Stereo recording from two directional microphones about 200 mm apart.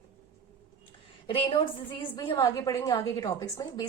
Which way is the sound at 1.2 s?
25° left (ahead or behind).